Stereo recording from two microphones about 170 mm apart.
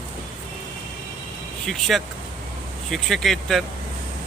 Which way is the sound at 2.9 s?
Centre (ahead or behind).